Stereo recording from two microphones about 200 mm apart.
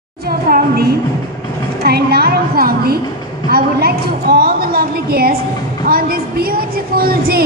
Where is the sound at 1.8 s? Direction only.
50° right (ahead or behind).